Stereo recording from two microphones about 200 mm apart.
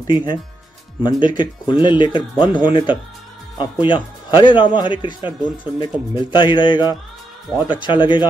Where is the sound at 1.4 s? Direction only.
25° left (ahead or behind).